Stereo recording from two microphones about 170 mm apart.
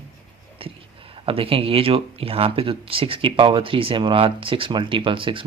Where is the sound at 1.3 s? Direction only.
35° right (ahead or behind).